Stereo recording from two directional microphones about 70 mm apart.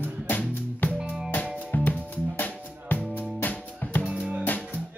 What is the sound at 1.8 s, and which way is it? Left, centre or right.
Music, left.